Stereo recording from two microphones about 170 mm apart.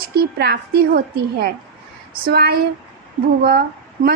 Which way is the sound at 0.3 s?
70° right (ahead or behind).